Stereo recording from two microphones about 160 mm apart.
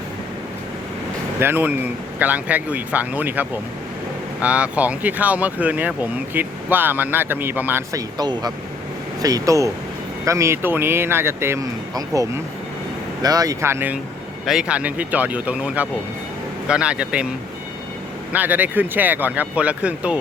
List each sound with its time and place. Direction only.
1.4 s speech: 15° right (ahead or behind)
18.3 s speech: 10° right (ahead or behind)